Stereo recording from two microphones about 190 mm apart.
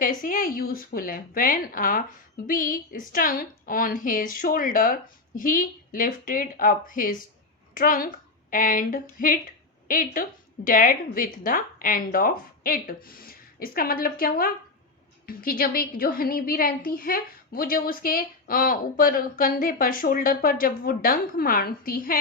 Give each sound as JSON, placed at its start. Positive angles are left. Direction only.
{"t": 0.0, "sound": "a woman's voice", "side_deg": 45}